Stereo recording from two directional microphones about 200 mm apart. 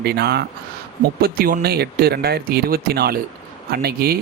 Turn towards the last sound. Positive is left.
turn(degrees=-50)  # may be behind; listen again after turning